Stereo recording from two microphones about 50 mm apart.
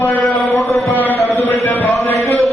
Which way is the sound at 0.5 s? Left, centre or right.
Left.